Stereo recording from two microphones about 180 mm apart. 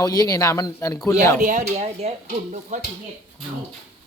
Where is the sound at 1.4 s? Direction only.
45° right (ahead or behind).